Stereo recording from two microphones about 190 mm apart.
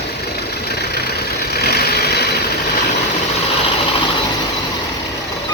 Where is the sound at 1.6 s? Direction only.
55° left (ahead or behind).